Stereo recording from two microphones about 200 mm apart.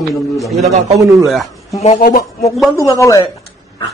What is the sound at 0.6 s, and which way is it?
Speech, 30° right (ahead or behind).